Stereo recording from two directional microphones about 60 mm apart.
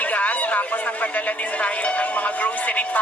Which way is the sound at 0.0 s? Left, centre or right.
Left.